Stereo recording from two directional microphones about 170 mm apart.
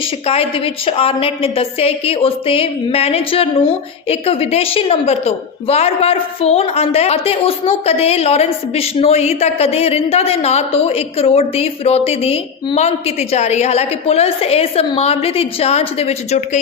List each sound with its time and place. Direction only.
0.3 s a woman's voice: 35° left (ahead or behind)